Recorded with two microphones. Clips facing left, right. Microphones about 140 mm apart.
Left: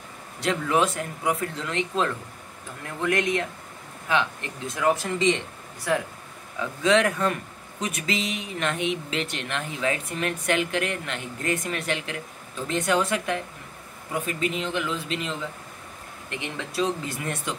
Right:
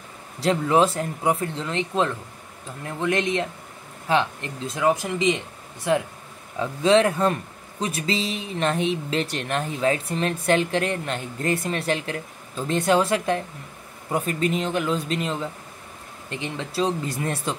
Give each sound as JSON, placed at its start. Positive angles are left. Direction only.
{"t": 0.4, "sound": "speech", "side_deg": -30}